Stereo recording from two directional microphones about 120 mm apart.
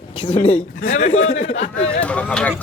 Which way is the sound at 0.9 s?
90° left.